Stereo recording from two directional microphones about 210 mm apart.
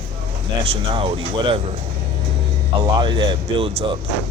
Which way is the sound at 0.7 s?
25° right (ahead or behind).